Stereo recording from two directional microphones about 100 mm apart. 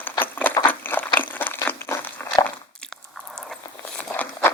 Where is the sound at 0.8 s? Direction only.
20° left (ahead or behind).